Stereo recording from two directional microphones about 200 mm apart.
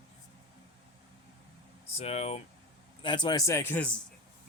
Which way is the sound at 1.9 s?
30° left (ahead or behind).